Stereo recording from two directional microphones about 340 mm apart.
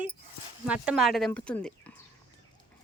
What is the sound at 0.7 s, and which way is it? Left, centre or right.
Speech, centre.